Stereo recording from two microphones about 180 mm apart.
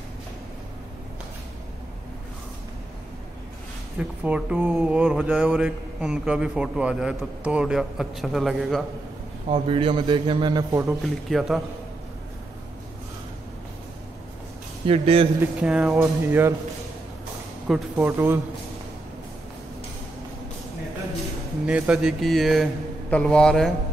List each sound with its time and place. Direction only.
4.2 s speech: 5° right (ahead or behind)
9.5 s a man's voice: 30° right (ahead or behind)
10.9 s speech: centre (ahead or behind)
14.9 s a man's voice: 30° right (ahead or behind)
15.6 s speech: 5° right (ahead or behind)
16.0 s speech: 15° right (ahead or behind)
17.6 s speech: 5° right (ahead or behind)
21.6 s speech: 5° right (ahead or behind)